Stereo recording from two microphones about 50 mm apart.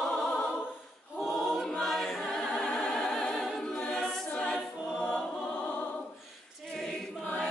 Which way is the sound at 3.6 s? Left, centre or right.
Centre.